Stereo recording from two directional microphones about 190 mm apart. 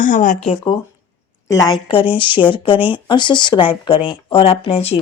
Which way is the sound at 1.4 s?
15° left (ahead or behind).